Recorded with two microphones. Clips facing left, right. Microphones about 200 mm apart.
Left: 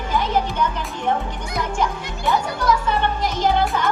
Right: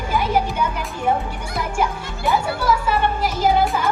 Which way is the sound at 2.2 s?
5° right (ahead or behind).